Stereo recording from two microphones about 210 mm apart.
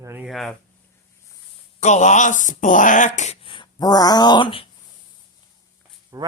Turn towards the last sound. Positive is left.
turn(degrees=-15)  # may be behind; listen again after turning